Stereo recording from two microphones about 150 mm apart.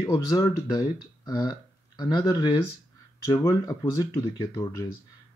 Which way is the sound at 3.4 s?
20° left (ahead or behind).